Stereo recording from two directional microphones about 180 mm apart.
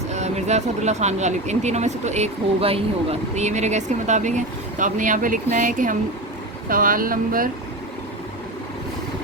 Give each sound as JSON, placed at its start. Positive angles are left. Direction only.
{"t": 0.1, "sound": "speech", "side_deg": -40}